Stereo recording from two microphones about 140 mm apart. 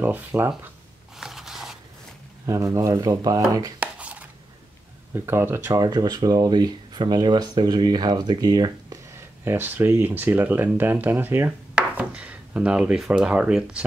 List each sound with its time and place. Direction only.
0.0 s speech: 15° right (ahead or behind)
1.1 s a sound: centre (ahead or behind)
2.4 s speech: 25° right (ahead or behind)
3.8 s a sound: 10° right (ahead or behind)
5.1 s speech: 15° right (ahead or behind)
5.8 s speech: 30° right (ahead or behind); by 13.8 s 5° right (ahead or behind)